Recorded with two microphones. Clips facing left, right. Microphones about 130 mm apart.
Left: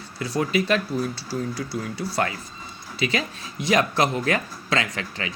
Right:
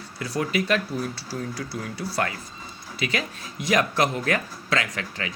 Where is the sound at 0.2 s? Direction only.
25° left (ahead or behind).